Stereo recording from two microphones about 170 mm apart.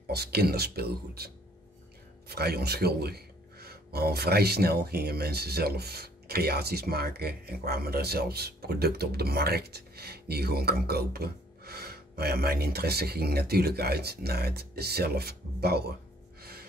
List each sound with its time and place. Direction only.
0.0 s speech: 70° right (ahead or behind)
16.3 s gasp: 65° right (ahead or behind)